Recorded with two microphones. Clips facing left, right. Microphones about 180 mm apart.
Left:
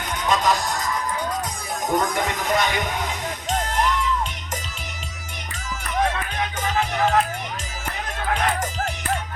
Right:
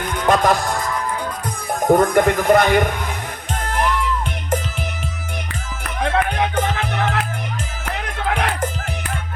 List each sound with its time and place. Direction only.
0.3 s music: 55° right (ahead or behind)
1.8 s speech: 55° right (ahead or behind)
3.5 s music: 55° right (ahead or behind)
6.1 s music: 60° right (ahead or behind)
8.4 s music: 55° right (ahead or behind)